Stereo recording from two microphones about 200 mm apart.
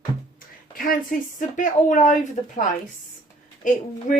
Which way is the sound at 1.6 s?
40° left (ahead or behind).